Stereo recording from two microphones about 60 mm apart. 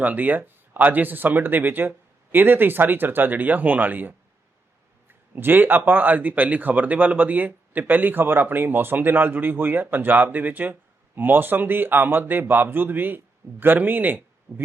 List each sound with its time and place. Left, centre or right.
0.0 s speech: right
5.3 s speech: right